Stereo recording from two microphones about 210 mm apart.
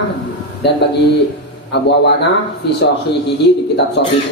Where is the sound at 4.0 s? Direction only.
60° left (ahead or behind).